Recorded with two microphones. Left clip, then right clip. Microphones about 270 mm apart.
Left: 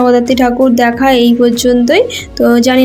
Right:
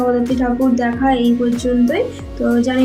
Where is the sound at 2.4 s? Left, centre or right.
Left.